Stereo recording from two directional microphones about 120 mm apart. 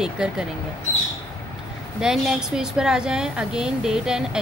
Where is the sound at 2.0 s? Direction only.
5° right (ahead or behind).